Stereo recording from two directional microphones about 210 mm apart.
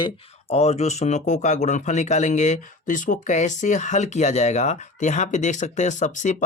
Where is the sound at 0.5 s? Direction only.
30° left (ahead or behind).